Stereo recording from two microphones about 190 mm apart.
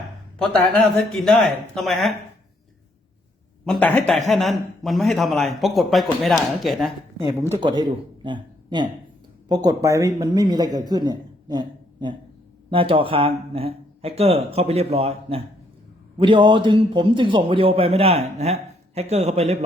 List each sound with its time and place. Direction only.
0.3 s a man's voice: 5° left (ahead or behind)
3.7 s a man's voice: 10° left (ahead or behind)
7.3 s a man's voice: 15° right (ahead or behind); by 19.5 s 35° right (ahead or behind)